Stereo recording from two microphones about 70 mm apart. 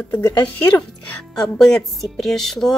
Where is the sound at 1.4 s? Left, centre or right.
Centre.